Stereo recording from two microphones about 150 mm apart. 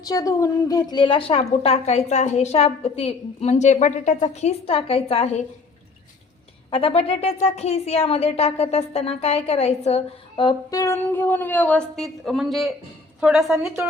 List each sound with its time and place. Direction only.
0.0 s speech: 25° left (ahead or behind); by 5.3 s 40° left (ahead or behind)
6.7 s a woman's voice: 40° left (ahead or behind); by 13.6 s 5° right (ahead or behind)